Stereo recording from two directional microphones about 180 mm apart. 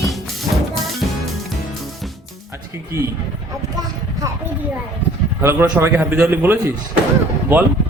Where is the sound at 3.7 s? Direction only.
20° right (ahead or behind).